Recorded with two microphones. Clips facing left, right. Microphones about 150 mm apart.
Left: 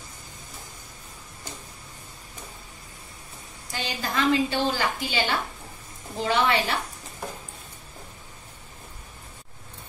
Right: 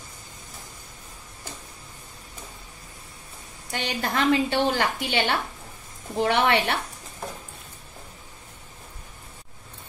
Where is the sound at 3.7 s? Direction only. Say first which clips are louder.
Right 3 dB; 60° right (ahead or behind).